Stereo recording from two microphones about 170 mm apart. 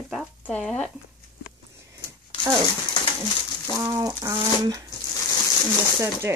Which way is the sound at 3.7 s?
20° right (ahead or behind).